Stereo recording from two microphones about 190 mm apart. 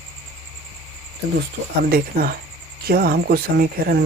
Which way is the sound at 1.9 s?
55° right (ahead or behind).